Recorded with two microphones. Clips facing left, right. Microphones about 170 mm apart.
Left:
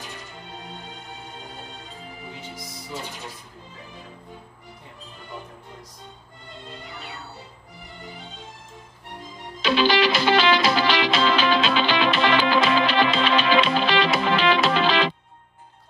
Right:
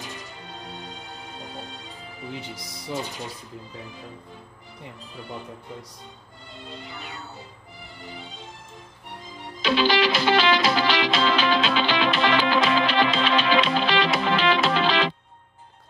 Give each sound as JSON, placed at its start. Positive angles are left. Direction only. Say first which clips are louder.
{"t": 9.6, "sound": "music", "louder": "left 1 dB", "side_deg": 70}